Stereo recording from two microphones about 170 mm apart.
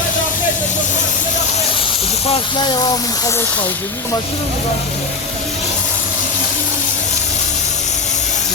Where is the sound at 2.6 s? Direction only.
25° left (ahead or behind).